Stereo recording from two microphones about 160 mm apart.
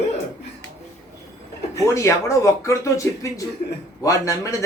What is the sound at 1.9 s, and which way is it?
Speech, 20° left (ahead or behind).